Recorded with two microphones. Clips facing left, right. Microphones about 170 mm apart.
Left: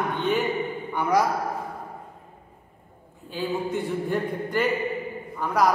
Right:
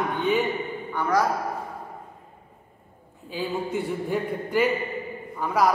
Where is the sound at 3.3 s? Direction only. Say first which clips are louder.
Left 1 dB; 5° right (ahead or behind).